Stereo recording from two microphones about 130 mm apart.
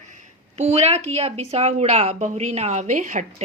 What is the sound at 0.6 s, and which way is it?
A woman's voice, 55° right (ahead or behind).